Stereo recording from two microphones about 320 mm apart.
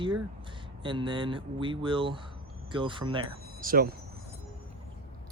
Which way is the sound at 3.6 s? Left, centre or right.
Right.